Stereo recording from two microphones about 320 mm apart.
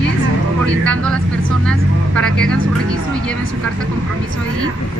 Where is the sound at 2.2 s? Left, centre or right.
Centre.